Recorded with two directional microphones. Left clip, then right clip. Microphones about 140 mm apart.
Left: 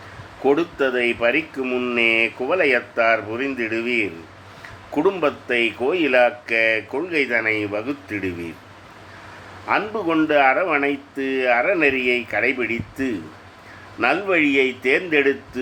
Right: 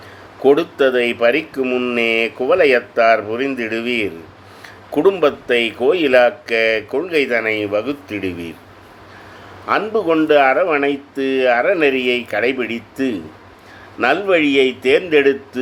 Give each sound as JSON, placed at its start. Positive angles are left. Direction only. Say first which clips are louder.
{"t": 0.4, "sound": "speech", "louder": "right 6 dB", "side_deg": -30}
{"t": 9.6, "sound": "speech", "louder": "right 5 dB", "side_deg": -25}